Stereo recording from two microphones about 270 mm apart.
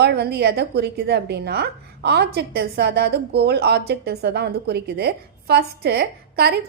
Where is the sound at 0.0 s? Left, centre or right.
Right.